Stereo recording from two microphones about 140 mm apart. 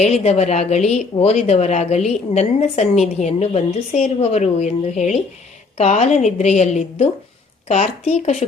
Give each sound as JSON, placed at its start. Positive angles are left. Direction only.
{"t": 0.0, "sound": "a woman's voice", "side_deg": 50}